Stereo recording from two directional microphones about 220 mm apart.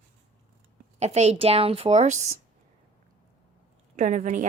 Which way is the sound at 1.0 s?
30° right (ahead or behind).